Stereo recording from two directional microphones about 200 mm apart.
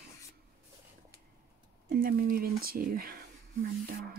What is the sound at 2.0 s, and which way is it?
Speech, 45° right (ahead or behind).